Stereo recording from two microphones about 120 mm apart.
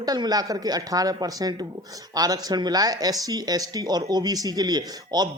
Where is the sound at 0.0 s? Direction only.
30° right (ahead or behind).